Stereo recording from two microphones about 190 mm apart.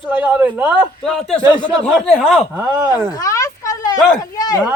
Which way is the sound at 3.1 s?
15° left (ahead or behind).